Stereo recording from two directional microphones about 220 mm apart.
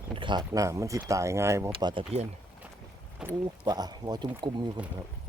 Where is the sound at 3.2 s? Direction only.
5° right (ahead or behind).